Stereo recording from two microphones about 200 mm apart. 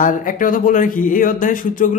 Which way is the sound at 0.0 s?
40° left (ahead or behind).